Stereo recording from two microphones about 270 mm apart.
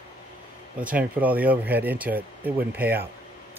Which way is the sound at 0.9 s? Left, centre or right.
Centre.